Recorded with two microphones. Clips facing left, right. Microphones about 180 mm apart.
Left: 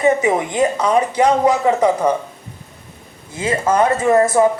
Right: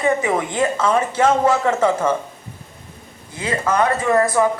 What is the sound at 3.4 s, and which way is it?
Speech, 25° left (ahead or behind).